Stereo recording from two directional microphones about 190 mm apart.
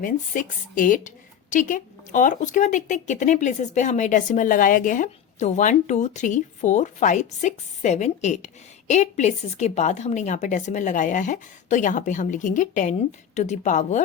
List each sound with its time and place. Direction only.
0.0 s a woman's voice: 45° left (ahead or behind)